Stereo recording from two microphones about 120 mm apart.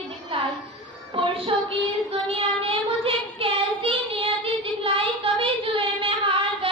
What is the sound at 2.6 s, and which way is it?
Child singing, 50° right (ahead or behind).